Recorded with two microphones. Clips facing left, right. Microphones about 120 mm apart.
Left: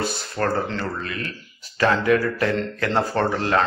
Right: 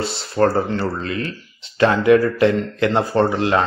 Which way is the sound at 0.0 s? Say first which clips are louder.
Right 7 dB; 25° right (ahead or behind).